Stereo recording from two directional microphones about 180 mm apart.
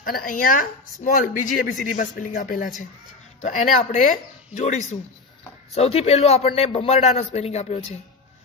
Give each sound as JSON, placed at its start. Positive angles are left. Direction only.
{"t": 0.0, "sound": "a man's voice", "side_deg": 50}